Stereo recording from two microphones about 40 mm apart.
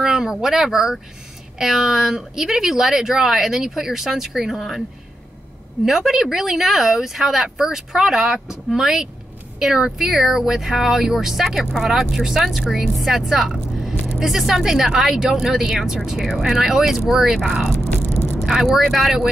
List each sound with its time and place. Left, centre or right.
0.0 s speech: centre
5.9 s speech: centre